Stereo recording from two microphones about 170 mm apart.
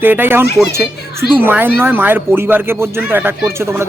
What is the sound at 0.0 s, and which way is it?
Speech, 10° right (ahead or behind).